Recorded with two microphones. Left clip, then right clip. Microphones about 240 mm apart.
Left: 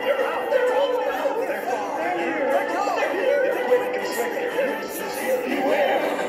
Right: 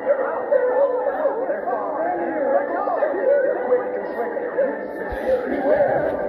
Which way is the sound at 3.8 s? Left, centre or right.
Left.